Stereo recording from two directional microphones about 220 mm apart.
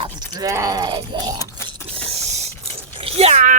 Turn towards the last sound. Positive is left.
turn(degrees=-30)  # may be behind; listen again after turning